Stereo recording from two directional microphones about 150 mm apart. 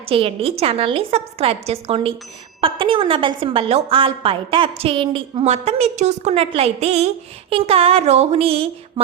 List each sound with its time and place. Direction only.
0.0 s a woman's voice: 35° right (ahead or behind)